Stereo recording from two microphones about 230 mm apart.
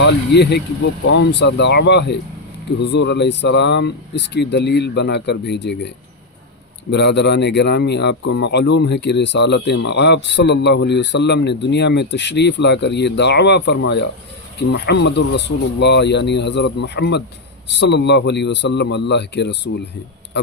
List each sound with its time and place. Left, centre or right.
0.0 s a man's voice: left
6.9 s a man's voice: left